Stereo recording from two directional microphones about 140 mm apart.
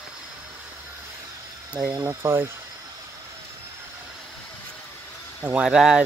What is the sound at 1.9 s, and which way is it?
Speech, 20° right (ahead or behind).